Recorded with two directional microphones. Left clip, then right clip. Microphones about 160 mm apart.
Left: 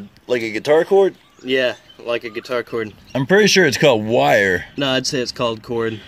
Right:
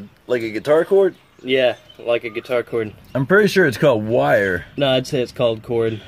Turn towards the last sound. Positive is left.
turn(degrees=0)  # may be behind; listen again after turning